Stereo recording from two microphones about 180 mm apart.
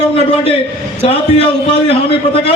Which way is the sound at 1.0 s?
30° left (ahead or behind).